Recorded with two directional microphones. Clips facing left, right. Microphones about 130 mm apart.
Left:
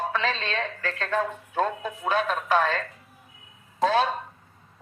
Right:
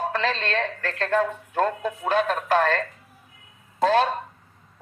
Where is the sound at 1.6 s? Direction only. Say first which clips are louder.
Right 3 dB; 50° right (ahead or behind).